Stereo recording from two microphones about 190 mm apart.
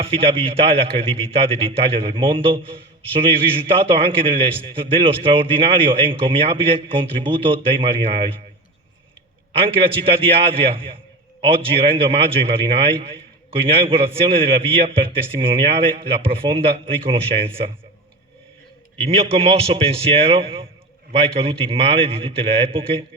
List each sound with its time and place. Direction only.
0.0 s a man's voice: 30° right (ahead or behind)
9.6 s a man's voice: 30° right (ahead or behind)
19.0 s a man's voice: 30° right (ahead or behind)